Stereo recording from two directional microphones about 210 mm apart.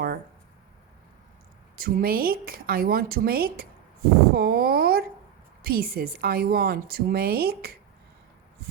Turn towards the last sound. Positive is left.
turn(degrees=-45)  # may be behind; listen again after turning